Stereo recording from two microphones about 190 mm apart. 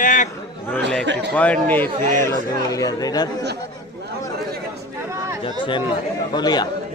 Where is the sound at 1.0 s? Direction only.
70° right (ahead or behind).